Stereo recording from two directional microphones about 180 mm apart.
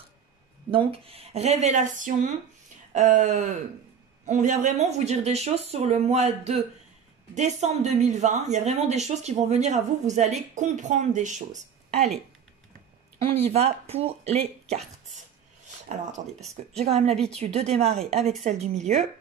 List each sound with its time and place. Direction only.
0.7 s speech: 30° right (ahead or behind)
13.3 s speech: 35° right (ahead or behind)
16.7 s speech: 35° right (ahead or behind)